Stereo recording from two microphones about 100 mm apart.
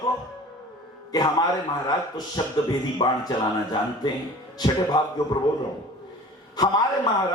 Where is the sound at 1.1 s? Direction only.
45° left (ahead or behind).